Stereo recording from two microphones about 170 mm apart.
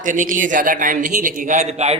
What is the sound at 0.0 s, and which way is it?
Speech, 50° right (ahead or behind).